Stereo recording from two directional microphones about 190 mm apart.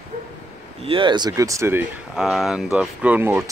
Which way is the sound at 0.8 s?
25° right (ahead or behind).